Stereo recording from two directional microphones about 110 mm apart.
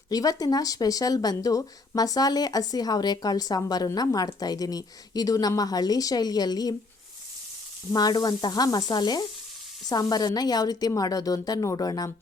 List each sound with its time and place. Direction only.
0.1 s speech: 35° left (ahead or behind)
7.9 s speech: 35° left (ahead or behind)